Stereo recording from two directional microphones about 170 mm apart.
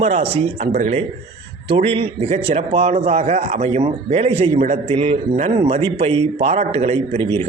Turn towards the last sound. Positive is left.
turn(degrees=-35)  # may be behind; listen again after turning